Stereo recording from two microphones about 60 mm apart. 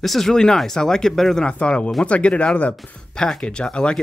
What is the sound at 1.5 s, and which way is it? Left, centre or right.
Speech, centre.